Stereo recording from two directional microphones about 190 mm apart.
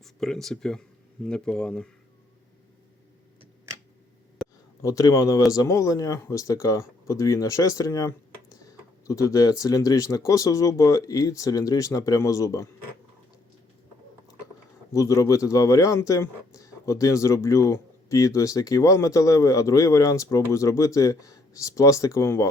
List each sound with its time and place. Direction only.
0.0 s speech: centre (ahead or behind)
4.4 s a sound: centre (ahead or behind)
4.8 s speech: 20° left (ahead or behind)
14.9 s speech: 20° left (ahead or behind)